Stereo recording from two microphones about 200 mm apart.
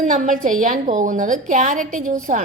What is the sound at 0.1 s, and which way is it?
A woman's voice, 40° right (ahead or behind).